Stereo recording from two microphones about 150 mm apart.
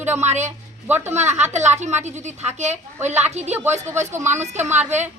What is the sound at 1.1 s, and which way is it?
A woman's voice, 50° right (ahead or behind).